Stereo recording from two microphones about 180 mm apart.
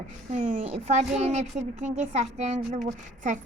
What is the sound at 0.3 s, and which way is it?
A woman's voice, 40° right (ahead or behind).